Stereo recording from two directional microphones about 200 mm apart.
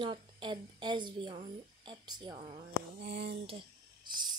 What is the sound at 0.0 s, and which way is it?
A woman's voice, 25° right (ahead or behind).